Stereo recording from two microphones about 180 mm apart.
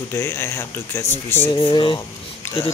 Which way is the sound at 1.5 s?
30° left (ahead or behind).